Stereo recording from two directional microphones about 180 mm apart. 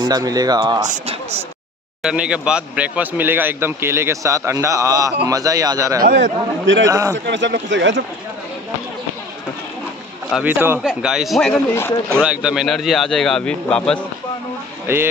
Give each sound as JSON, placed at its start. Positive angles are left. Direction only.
{"t": 0.0, "sound": "speech", "side_deg": -20}
{"t": 2.0, "sound": "speech", "side_deg": -5}
{"t": 6.6, "sound": "a man's voice", "side_deg": -90}
{"t": 6.9, "sound": "speech", "side_deg": -15}
{"t": 7.2, "sound": "speech", "side_deg": -80}
{"t": 10.3, "sound": "a man's voice", "side_deg": -10}
{"t": 11.7, "sound": "speech", "side_deg": 15}
{"t": 12.2, "sound": "a man's voice", "side_deg": -5}
{"t": 14.9, "sound": "speech", "side_deg": -15}